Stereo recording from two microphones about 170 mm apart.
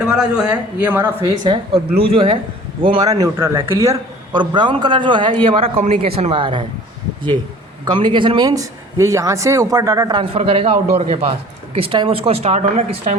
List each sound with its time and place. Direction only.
0.0 s speech: 5° right (ahead or behind)
2.1 s a man's voice: 35° right (ahead or behind)
7.9 s a man's voice: 30° right (ahead or behind)